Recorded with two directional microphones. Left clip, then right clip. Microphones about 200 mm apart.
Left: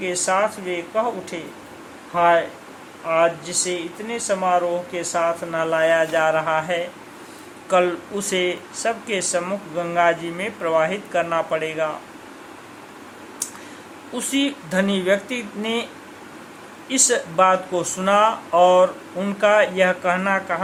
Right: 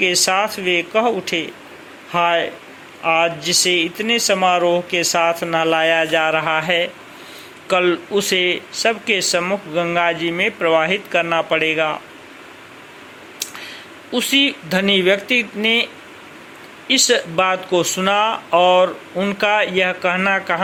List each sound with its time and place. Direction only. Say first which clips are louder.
0.0 s speech: right 4 dB; 25° right (ahead or behind)
14.1 s speech: right 7 dB; 15° right (ahead or behind)
16.9 s speech: right 5 dB; 20° right (ahead or behind)